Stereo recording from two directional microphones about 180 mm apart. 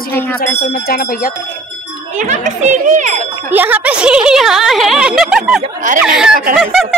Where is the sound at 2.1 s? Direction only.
40° right (ahead or behind).